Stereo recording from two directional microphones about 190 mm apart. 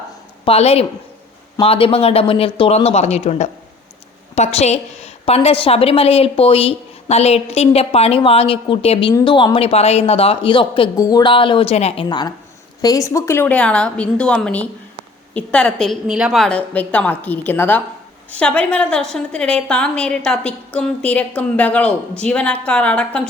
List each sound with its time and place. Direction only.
0.4 s a woman's voice: 30° left (ahead or behind)
12.0 s a woman's voice: 25° left (ahead or behind); by 23.3 s 5° left (ahead or behind)